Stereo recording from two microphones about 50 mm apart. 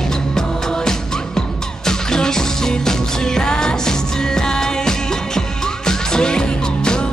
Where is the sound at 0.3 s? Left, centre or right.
Centre.